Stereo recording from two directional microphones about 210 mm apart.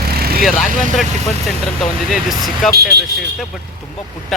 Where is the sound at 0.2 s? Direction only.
45° right (ahead or behind).